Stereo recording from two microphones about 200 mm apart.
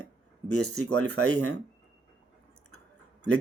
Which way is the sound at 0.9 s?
5° left (ahead or behind).